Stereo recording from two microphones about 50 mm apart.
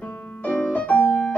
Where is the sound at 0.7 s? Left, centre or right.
Left.